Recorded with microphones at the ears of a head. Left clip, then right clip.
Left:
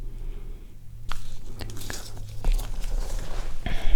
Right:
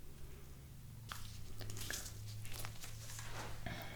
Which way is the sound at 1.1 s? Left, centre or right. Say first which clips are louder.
Left 11 dB; left.